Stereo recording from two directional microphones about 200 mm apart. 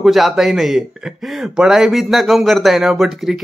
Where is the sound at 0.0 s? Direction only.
Centre (ahead or behind).